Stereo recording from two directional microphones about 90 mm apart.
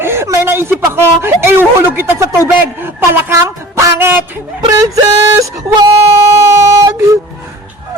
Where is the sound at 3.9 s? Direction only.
20° right (ahead or behind).